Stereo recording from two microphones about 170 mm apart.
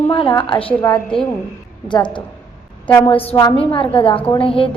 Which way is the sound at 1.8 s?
25° left (ahead or behind).